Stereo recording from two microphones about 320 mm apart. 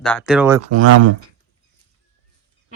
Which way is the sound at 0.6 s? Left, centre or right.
Right.